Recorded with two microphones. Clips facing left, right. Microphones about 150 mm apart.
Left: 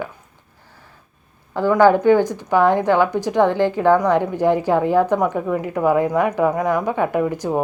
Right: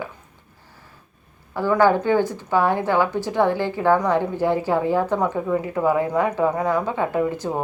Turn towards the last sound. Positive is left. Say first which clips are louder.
# left 2 dB
turn(degrees=15)  # may be behind; listen again after turning